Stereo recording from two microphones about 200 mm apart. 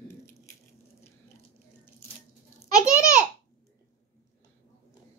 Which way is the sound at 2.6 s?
15° left (ahead or behind).